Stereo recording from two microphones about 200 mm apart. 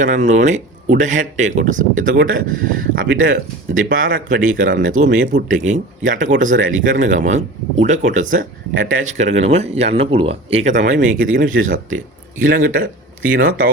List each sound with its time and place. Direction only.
0.0 s speech: 40° right (ahead or behind)